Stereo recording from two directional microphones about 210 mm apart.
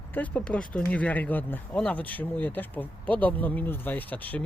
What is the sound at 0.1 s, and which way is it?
Speech, 10° left (ahead or behind).